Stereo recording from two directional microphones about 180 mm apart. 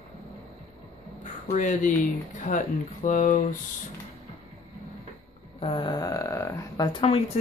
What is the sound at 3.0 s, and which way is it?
Speech, 45° left (ahead or behind).